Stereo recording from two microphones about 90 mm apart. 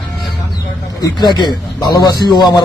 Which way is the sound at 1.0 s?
55° left (ahead or behind).